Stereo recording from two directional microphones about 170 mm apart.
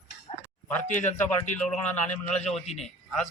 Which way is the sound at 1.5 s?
5° left (ahead or behind).